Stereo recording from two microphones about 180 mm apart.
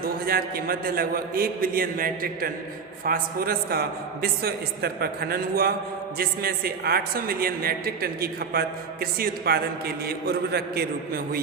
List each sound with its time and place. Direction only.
0.0 s a man's voice: 55° right (ahead or behind)